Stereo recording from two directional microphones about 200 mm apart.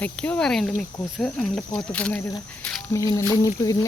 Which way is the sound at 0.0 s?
5° left (ahead or behind).